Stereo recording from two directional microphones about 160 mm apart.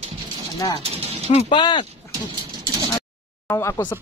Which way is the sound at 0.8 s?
40° right (ahead or behind).